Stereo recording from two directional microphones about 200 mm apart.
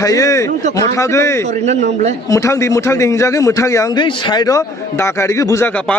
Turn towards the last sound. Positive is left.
turn(degrees=5)  # may be behind; listen again after turning